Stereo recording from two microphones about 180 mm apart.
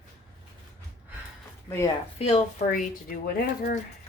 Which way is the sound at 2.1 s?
35° left (ahead or behind).